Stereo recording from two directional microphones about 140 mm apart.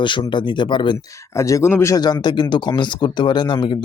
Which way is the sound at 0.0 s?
35° left (ahead or behind).